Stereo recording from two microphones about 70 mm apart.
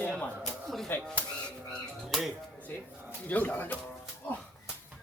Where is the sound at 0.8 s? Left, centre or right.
Left.